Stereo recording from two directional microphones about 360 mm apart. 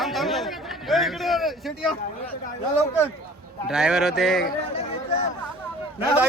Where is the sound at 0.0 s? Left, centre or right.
Centre.